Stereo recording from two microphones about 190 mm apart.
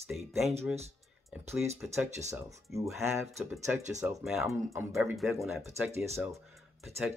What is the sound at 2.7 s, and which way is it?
Speech, 15° right (ahead or behind).